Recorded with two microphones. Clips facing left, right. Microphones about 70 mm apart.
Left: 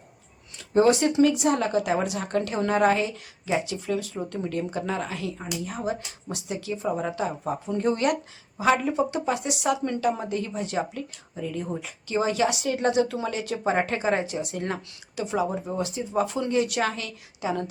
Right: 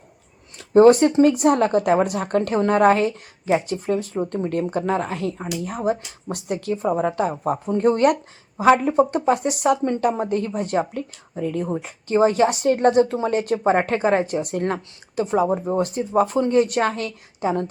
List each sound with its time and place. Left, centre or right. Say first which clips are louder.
0.7 s speech: right 7 dB; right
4.4 s speech: right 5 dB; right